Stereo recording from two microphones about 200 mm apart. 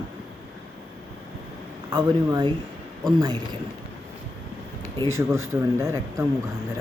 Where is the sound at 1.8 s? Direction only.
20° right (ahead or behind).